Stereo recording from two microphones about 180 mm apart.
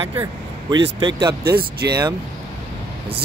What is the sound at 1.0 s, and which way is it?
Speech, 25° right (ahead or behind).